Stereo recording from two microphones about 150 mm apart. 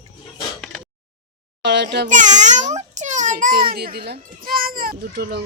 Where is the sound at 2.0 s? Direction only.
55° right (ahead or behind); by 5.4 s 90° right.